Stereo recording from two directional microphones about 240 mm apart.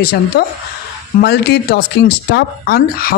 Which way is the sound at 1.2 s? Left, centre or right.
Left.